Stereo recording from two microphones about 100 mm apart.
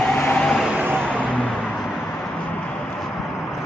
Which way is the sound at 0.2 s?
20° left (ahead or behind).